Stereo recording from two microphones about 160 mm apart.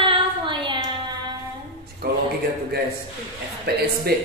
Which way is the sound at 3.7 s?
80° right.